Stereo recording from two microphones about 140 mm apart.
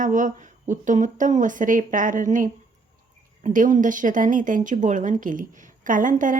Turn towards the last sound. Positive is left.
turn(degrees=-70)  # may be behind; listen again after turning